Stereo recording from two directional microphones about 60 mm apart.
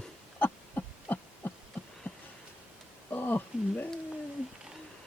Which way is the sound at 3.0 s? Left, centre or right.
Left.